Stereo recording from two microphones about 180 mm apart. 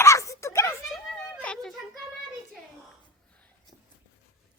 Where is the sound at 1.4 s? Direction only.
5° left (ahead or behind).